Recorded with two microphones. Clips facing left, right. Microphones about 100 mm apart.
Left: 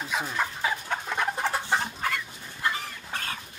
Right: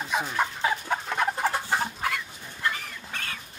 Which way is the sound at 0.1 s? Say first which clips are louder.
Right 3 dB; centre (ahead or behind).